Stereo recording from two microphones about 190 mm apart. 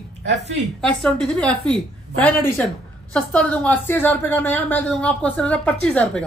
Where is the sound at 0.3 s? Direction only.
65° right (ahead or behind).